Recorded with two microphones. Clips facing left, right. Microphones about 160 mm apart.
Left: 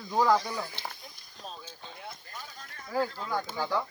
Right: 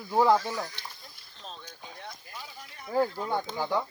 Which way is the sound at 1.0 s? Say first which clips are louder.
Left 1 dB; 10° left (ahead or behind).